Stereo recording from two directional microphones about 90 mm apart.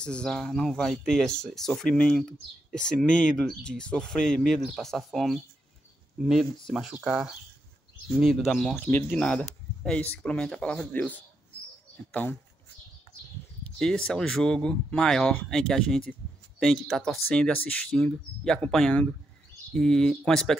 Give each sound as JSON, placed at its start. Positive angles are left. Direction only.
{"t": 0.0, "sound": "speech", "side_deg": 10}
{"t": 8.7, "sound": "speech", "side_deg": 20}
{"t": 13.7, "sound": "speech", "side_deg": 10}